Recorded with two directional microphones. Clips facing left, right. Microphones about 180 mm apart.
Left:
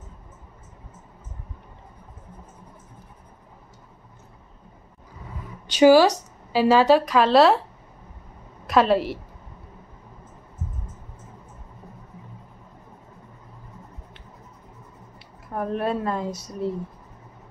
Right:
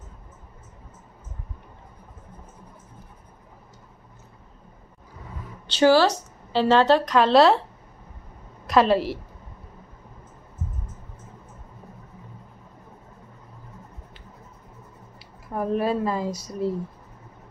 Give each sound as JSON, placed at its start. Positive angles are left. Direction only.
{"t": 5.7, "sound": "a woman's voice", "side_deg": 15}
{"t": 8.6, "sound": "a woman's voice", "side_deg": 0}
{"t": 15.5, "sound": "speech", "side_deg": 0}